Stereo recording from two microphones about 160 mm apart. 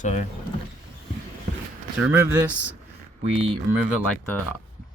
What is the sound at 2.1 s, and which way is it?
Speech, 15° right (ahead or behind).